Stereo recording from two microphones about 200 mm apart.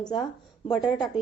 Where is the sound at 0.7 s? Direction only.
5° left (ahead or behind).